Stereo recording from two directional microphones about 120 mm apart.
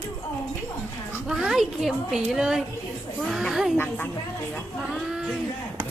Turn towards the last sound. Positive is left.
turn(degrees=-5)  # may be behind; listen again after turning